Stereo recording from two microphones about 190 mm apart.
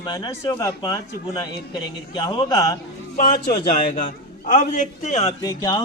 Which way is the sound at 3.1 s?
45° left (ahead or behind).